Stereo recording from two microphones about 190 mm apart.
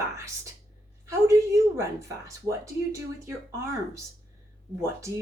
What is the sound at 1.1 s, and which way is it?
A woman's voice, 15° right (ahead or behind).